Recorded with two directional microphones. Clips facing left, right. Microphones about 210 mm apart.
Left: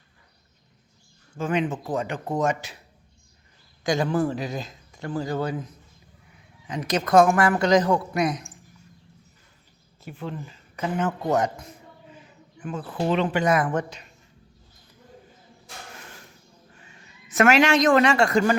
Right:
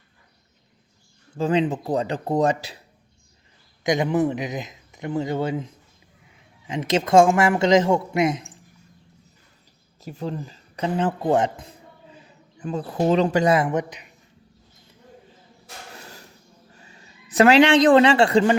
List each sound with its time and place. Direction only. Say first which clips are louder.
1.4 s speech: right 4 dB; 35° right (ahead or behind)
3.8 s speech: right 2 dB; 20° right (ahead or behind)
10.0 s speech: right 4 dB; 40° right (ahead or behind)
12.7 s speech: right 4 dB; 40° right (ahead or behind); by 14.1 s 15° right (ahead or behind)
17.2 s speech: right 4 dB; 35° right (ahead or behind)